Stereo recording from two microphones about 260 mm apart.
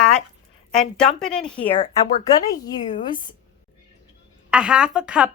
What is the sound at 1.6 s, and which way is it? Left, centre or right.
Speech, left.